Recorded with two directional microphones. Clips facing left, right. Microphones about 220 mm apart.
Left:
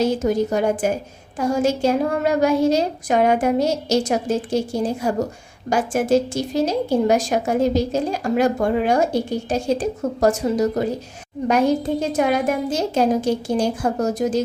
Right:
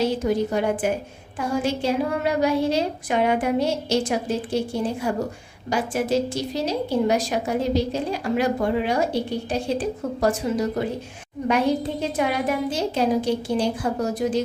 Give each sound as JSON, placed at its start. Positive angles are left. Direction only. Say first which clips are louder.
{"t": 0.0, "sound": "a woman's voice", "louder": "left 3 dB", "side_deg": 45}